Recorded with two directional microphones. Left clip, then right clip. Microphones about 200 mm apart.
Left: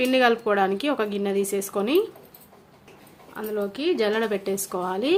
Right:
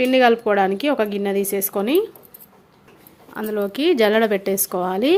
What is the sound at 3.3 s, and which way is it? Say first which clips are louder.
Speech: right 5 dB; 35° right (ahead or behind).